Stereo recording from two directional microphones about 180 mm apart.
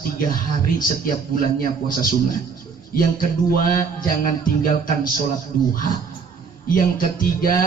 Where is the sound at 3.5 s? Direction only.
50° left (ahead or behind).